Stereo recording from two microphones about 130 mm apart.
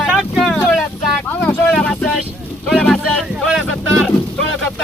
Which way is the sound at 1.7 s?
5° left (ahead or behind).